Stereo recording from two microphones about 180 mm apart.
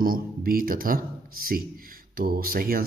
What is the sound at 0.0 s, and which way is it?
Speech, 55° right (ahead or behind).